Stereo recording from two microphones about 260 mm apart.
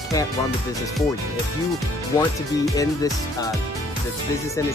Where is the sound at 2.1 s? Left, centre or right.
Centre.